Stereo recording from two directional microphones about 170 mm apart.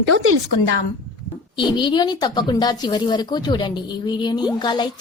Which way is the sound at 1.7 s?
25° left (ahead or behind).